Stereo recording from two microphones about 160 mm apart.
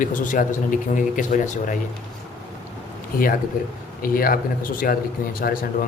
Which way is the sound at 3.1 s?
65° left (ahead or behind).